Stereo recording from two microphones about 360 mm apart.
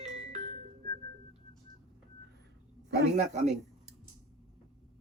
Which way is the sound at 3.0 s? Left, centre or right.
Centre.